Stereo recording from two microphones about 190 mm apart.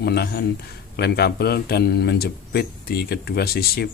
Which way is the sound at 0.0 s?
55° left (ahead or behind).